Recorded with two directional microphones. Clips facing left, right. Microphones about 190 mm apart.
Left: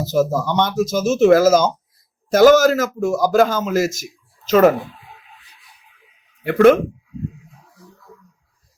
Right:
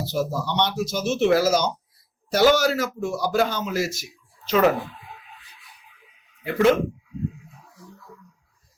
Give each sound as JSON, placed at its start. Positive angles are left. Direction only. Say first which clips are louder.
{"t": 0.0, "sound": "speech", "louder": "left 7 dB", "side_deg": 45}
{"t": 6.4, "sound": "speech", "louder": "left 7 dB", "side_deg": 55}